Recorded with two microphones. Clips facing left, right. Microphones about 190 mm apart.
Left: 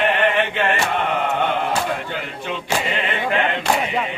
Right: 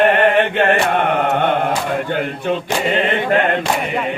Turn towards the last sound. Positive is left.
turn(degrees=-50)  # may be behind; listen again after turning